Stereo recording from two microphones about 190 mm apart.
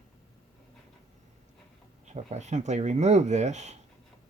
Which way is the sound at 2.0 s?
35° right (ahead or behind).